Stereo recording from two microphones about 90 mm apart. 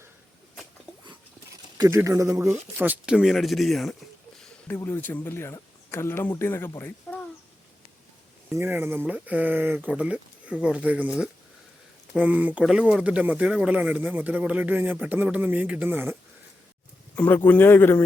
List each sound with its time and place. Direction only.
1.9 s speech: 35° right (ahead or behind)
2.7 s speech: 15° right (ahead or behind)
3.2 s speech: centre (ahead or behind)
4.8 s a man's voice: 25° left (ahead or behind)
8.5 s speech: 25° right (ahead or behind)
9.9 s speech: 15° right (ahead or behind)
17.2 s a man's voice: 20° left (ahead or behind)